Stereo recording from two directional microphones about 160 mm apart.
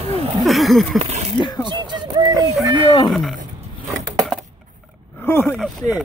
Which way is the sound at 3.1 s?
Centre (ahead or behind).